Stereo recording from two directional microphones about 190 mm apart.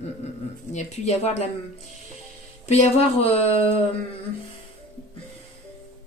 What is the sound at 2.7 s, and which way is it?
A woman's voice, 35° left (ahead or behind).